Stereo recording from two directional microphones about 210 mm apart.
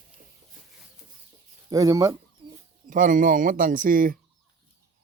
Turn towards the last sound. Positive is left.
turn(degrees=-40)  # may be behind; listen again after turning